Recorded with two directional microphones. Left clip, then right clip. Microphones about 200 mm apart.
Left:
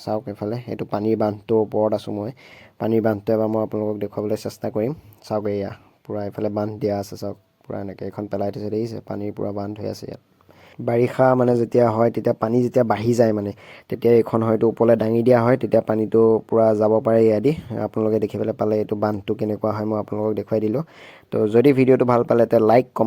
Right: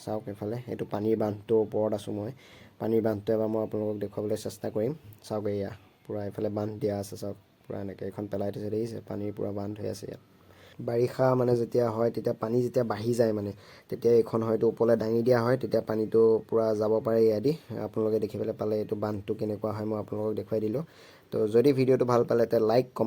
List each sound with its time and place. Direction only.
0.0 s speech: 35° left (ahead or behind)